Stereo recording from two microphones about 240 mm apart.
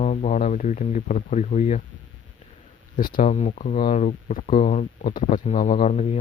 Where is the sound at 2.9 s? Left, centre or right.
Left.